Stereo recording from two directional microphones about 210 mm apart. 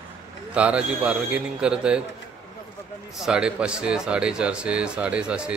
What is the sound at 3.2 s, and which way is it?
Speech, 5° right (ahead or behind).